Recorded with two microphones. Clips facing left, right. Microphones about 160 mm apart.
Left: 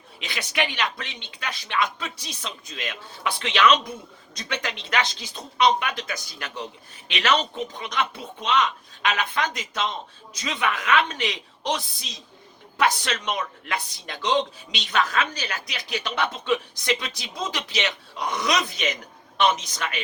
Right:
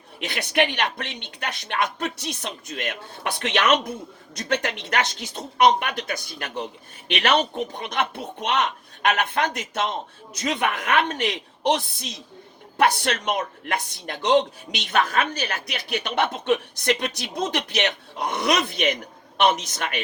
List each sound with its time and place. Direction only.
0.2 s speech: 55° right (ahead or behind)